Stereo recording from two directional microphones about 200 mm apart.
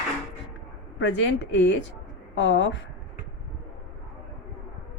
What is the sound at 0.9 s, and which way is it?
A woman's voice, 70° left (ahead or behind).